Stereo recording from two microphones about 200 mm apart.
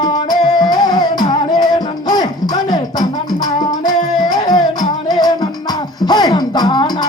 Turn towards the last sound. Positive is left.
turn(degrees=20)  # may be behind; listen again after turning